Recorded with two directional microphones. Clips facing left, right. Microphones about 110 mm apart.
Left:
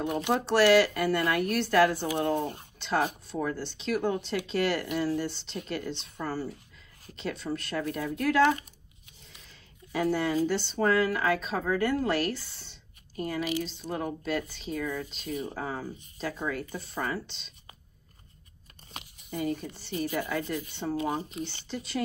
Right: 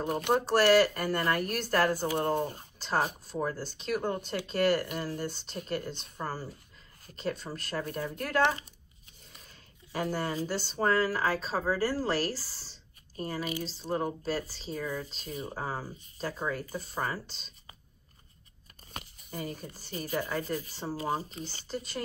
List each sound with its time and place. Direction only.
0.2 s speech: 45° right (ahead or behind)
9.9 s speech: 45° right (ahead or behind)
18.9 s speech: 40° right (ahead or behind)